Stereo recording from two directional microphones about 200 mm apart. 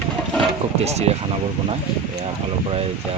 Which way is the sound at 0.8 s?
30° right (ahead or behind).